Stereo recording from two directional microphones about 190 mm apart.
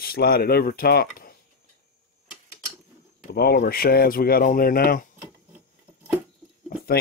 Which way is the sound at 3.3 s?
55° left (ahead or behind).